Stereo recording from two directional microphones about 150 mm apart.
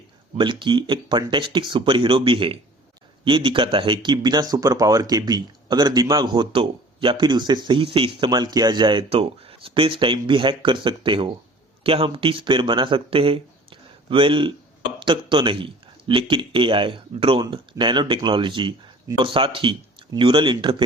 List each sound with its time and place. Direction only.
0.3 s speech: 35° right (ahead or behind)